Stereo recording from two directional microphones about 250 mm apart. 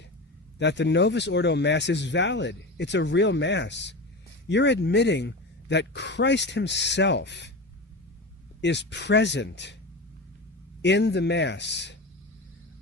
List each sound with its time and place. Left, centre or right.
0.6 s speech: left
8.6 s speech: left
10.8 s speech: left